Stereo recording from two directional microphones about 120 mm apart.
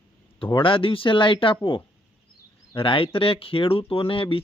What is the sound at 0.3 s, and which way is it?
Speech, 45° left (ahead or behind).